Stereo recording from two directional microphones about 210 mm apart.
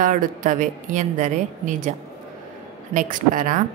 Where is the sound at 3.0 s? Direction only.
40° right (ahead or behind).